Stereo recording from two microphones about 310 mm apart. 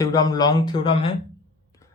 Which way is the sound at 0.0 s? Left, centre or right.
Centre.